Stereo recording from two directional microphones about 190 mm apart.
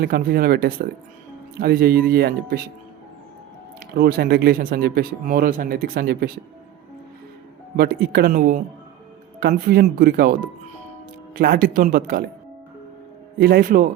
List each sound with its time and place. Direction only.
0.0 s speech: 50° right (ahead or behind)
3.9 s speech: 55° right (ahead or behind)
7.8 s speech: 55° right (ahead or behind)
13.4 s speech: 50° right (ahead or behind)